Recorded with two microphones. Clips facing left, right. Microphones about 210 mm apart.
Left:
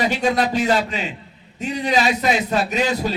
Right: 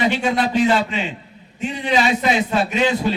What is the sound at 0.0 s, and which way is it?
Speech, 40° left (ahead or behind).